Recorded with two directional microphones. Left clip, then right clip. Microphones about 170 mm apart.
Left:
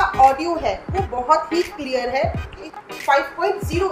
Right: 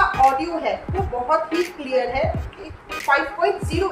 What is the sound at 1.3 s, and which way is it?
Speech, 50° left (ahead or behind).